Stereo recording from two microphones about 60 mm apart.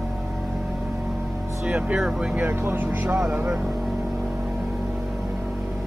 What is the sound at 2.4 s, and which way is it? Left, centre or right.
Speech, right.